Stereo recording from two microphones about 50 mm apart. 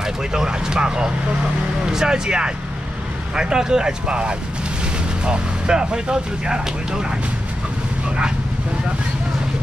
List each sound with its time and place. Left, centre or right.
0.0 s speech: centre